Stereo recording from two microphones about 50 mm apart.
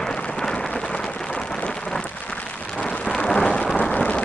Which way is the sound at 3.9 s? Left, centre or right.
Left.